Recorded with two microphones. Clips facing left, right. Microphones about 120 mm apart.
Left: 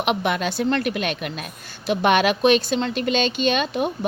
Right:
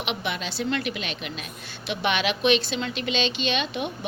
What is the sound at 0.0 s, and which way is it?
A woman's voice, 50° left (ahead or behind).